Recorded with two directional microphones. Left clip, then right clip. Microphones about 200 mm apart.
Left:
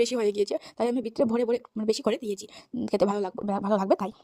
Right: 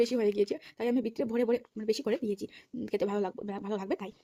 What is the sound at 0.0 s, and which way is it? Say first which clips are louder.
Speech: left 3 dB; 35° left (ahead or behind).